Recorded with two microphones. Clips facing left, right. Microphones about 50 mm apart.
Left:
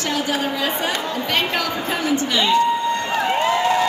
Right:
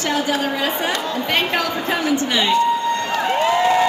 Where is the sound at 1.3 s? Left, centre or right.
Centre.